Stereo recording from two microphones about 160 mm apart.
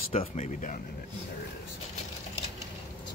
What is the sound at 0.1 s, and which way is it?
Speech, 40° left (ahead or behind).